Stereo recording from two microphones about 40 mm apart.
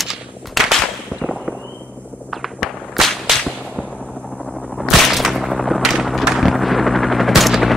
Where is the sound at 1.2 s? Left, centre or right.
Centre.